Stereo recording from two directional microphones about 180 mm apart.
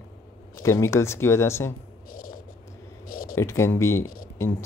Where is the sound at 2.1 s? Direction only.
55° left (ahead or behind).